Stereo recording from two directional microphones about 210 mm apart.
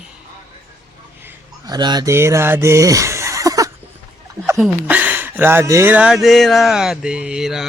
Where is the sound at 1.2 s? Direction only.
20° right (ahead or behind).